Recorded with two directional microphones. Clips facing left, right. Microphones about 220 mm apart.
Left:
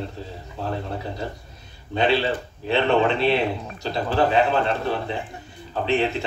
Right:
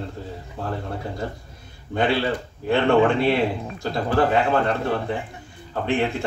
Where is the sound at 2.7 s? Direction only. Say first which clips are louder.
Right 2 dB; 50° right (ahead or behind).